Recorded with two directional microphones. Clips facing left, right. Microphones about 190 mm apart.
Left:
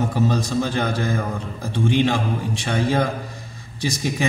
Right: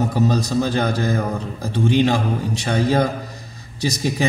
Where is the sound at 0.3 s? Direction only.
40° right (ahead or behind).